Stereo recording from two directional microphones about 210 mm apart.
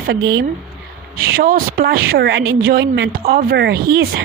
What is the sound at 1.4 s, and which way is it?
Speech, 45° right (ahead or behind).